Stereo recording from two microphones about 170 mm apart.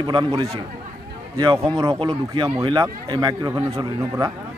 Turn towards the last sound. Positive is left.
turn(degrees=-25)  # may be behind; listen again after turning